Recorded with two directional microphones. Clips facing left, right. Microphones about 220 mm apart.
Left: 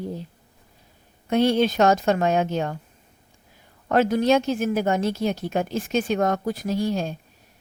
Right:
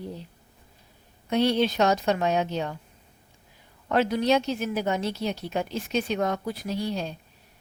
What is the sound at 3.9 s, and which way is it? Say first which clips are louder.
A woman's voice: left 4 dB; 45° left (ahead or behind).